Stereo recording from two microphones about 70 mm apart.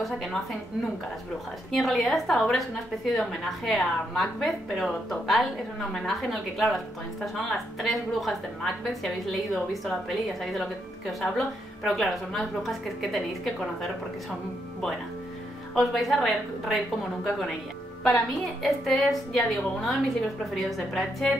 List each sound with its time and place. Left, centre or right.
1.7 s a woman's voice: centre
15.7 s a woman's voice: centre